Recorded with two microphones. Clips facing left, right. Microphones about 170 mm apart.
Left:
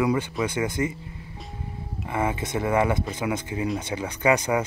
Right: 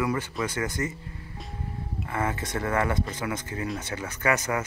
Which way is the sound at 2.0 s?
15° left (ahead or behind).